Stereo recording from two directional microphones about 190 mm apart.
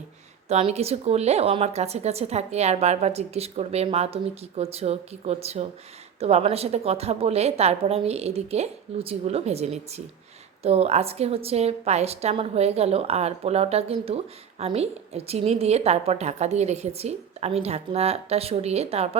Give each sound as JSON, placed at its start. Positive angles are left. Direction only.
{"t": 0.4, "sound": "a woman's voice", "side_deg": -35}